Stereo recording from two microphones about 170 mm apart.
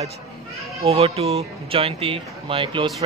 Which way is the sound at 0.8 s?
35° right (ahead or behind).